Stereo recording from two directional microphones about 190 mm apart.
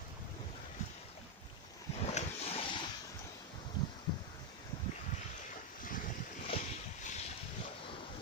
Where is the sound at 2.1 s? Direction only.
30° left (ahead or behind).